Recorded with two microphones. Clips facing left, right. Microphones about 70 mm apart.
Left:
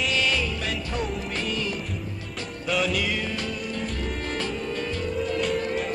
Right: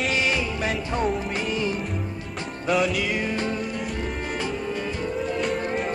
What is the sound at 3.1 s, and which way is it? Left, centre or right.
Music, right.